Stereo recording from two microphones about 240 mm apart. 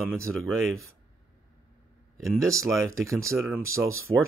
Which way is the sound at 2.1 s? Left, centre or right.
Centre.